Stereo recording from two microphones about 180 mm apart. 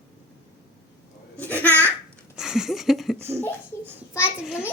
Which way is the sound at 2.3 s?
5° right (ahead or behind).